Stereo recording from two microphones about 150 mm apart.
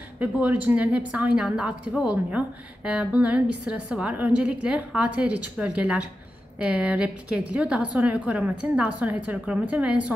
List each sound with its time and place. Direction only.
0.2 s a woman's voice: 10° right (ahead or behind)